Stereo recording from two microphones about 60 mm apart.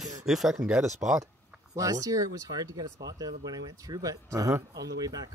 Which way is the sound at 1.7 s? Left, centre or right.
Right.